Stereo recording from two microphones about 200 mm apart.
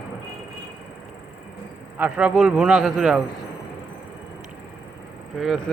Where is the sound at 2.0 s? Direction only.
5° right (ahead or behind).